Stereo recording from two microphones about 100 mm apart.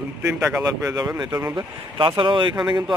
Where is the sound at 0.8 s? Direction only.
40° right (ahead or behind).